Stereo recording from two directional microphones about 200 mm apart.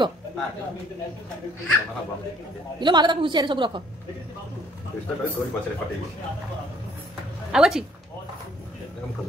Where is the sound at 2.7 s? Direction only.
20° right (ahead or behind).